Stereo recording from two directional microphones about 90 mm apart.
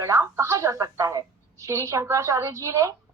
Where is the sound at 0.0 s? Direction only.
35° right (ahead or behind).